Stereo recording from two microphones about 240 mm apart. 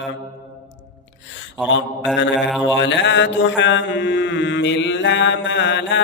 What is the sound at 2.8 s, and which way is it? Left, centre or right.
Mantra, left.